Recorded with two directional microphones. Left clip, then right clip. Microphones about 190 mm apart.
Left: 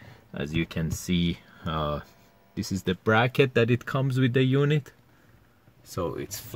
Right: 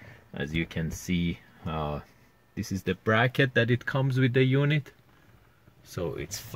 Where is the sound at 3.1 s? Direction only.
25° left (ahead or behind).